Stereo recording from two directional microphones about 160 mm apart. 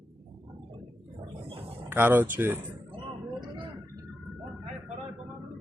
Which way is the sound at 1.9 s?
15° right (ahead or behind).